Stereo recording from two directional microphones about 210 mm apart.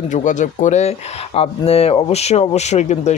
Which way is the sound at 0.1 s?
35° left (ahead or behind).